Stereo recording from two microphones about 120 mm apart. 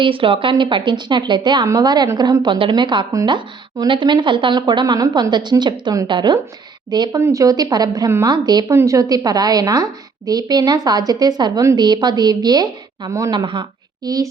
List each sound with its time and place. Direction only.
0.0 s speech: 45° right (ahead or behind); by 13.3 s 25° right (ahead or behind)
13.3 s a woman's voice: 40° right (ahead or behind)